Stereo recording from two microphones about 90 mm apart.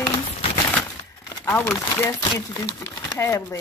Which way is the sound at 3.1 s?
35° left (ahead or behind).